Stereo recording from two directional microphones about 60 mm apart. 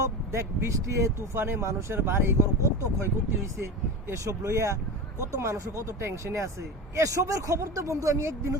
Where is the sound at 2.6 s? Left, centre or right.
Right.